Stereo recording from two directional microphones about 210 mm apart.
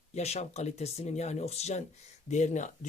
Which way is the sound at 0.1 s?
30° left (ahead or behind).